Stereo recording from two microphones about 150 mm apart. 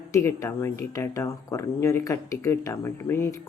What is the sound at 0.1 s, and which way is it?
Speech, 20° left (ahead or behind).